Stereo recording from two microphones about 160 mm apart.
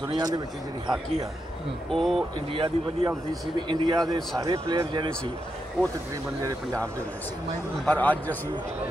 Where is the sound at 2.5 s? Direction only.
30° right (ahead or behind).